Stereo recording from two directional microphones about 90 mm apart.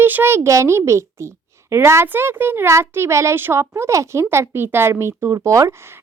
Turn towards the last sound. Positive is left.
turn(degrees=-30)  # may be behind; listen again after turning